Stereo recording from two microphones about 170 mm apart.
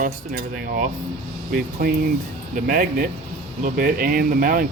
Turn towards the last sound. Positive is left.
turn(degrees=-55)  # may be behind; listen again after turning